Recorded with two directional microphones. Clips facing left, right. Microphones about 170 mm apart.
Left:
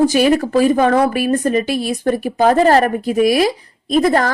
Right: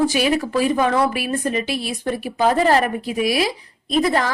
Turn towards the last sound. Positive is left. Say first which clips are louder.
# left 5 dB
turn(degrees=45)  # may be behind; listen again after turning